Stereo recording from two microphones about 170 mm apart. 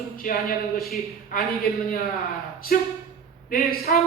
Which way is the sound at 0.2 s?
55° left (ahead or behind).